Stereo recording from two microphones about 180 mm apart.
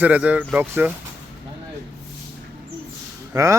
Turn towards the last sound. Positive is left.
turn(degrees=-15)  # may be behind; listen again after turning